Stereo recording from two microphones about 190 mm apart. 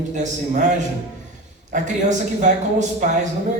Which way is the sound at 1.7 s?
40° right (ahead or behind).